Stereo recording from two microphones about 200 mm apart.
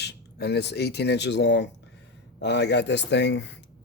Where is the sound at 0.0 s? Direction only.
55° left (ahead or behind).